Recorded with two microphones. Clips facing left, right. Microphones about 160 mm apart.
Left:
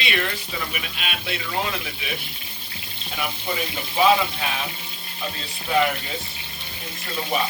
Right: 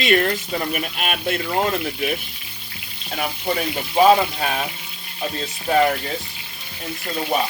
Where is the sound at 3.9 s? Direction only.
40° right (ahead or behind).